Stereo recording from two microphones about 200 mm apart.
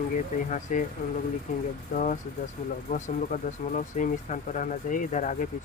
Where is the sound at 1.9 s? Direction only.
40° left (ahead or behind).